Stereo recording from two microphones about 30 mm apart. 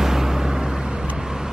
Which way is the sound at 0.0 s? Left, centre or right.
Centre.